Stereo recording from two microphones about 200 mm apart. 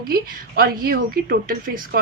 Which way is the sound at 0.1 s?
45° right (ahead or behind).